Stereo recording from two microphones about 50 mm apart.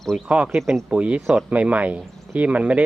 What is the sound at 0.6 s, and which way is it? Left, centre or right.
Speech, centre.